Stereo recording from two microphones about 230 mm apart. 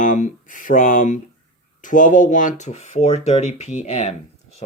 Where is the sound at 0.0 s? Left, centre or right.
Left.